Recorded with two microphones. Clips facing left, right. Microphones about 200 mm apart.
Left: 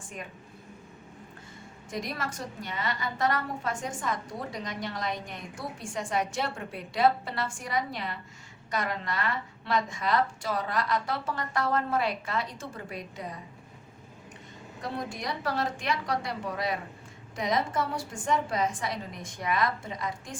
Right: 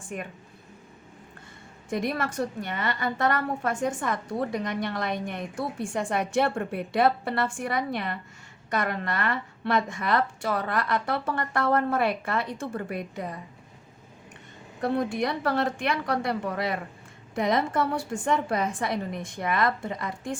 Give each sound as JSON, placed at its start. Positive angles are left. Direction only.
{"t": 0.1, "sound": "a woman's voice", "side_deg": -55}
{"t": 1.9, "sound": "a woman's voice", "side_deg": -60}
{"t": 14.8, "sound": "a woman's voice", "side_deg": -60}